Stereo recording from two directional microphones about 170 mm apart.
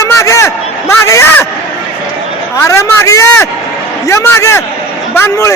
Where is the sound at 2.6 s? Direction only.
15° left (ahead or behind).